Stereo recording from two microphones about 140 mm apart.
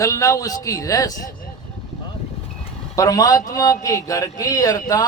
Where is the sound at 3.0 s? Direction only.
25° left (ahead or behind).